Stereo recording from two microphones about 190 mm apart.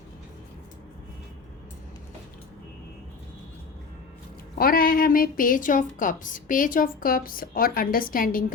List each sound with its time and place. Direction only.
4.5 s a woman's voice: 50° left (ahead or behind)